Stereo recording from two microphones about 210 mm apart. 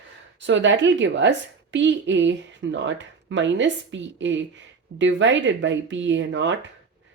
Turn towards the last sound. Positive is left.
turn(degrees=-60)  # may be behind; listen again after turning